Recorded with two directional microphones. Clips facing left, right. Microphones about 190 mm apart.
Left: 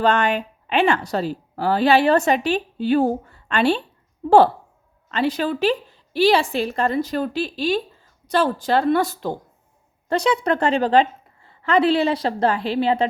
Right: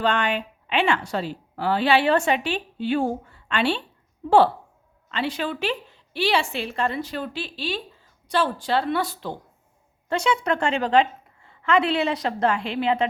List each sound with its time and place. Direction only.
0.0 s a woman's voice: 40° left (ahead or behind)
5.1 s a woman's voice: 40° left (ahead or behind)